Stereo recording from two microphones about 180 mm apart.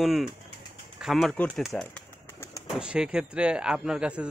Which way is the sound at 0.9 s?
Centre (ahead or behind).